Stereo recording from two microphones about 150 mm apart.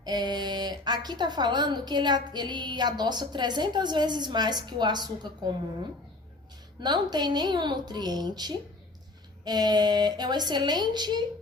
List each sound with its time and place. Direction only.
0.0 s a woman's voice: 30° right (ahead or behind)
6.7 s a woman's voice: 30° right (ahead or behind)